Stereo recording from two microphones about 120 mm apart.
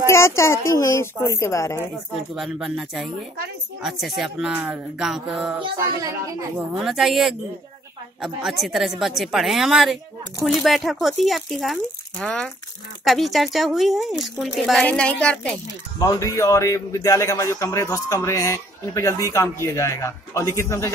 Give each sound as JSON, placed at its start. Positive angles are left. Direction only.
{"t": 0.1, "sound": "a man's voice", "side_deg": 25}
{"t": 2.3, "sound": "speech", "side_deg": -5}
{"t": 6.7, "sound": "speech", "side_deg": 0}
{"t": 16.0, "sound": "a man's voice", "side_deg": 30}